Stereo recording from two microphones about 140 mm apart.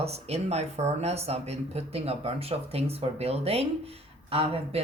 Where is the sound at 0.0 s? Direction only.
50° right (ahead or behind).